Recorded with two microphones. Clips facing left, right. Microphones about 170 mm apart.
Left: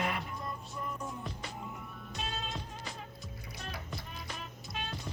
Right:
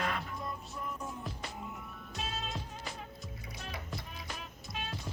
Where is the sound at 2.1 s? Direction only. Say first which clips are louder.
Even; centre (ahead or behind).